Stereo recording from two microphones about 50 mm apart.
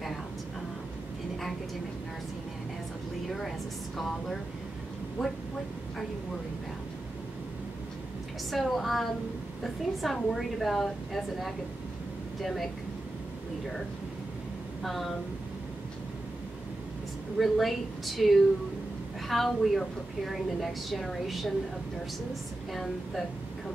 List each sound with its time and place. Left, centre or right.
3.3 s a woman's voice: centre
8.5 s a woman's voice: centre
14.8 s a woman's voice: centre
17.4 s a woman's voice: centre